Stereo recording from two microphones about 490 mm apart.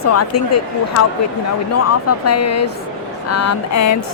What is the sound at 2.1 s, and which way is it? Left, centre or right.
A woman's voice, left.